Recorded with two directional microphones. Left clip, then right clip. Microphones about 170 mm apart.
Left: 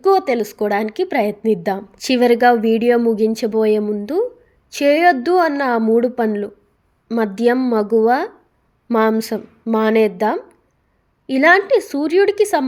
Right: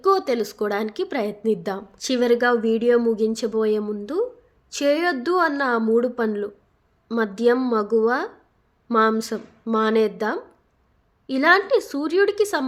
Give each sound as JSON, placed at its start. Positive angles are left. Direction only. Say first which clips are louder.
{"t": 0.0, "sound": "a woman's voice", "louder": "left 5 dB", "side_deg": 10}